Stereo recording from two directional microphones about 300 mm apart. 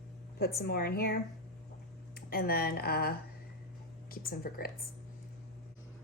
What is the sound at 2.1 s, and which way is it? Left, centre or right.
Speech, left.